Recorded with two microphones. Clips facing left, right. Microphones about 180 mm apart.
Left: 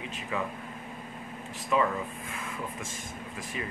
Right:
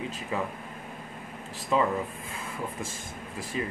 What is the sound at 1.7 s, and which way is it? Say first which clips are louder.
Speech: right 1 dB; 30° right (ahead or behind).